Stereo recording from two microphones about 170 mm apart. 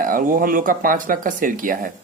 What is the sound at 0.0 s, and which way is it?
Speech, 55° right (ahead or behind).